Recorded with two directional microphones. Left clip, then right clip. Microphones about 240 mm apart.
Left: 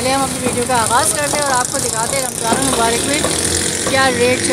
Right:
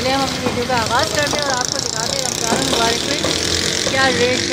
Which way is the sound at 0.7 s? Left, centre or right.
Centre.